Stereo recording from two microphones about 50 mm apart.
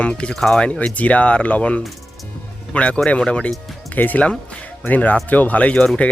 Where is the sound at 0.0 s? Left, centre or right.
Left.